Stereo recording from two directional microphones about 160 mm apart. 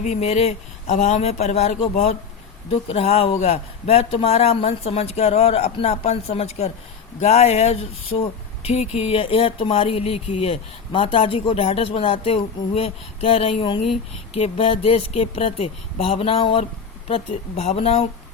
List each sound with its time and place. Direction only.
0.0 s speech: 45° left (ahead or behind)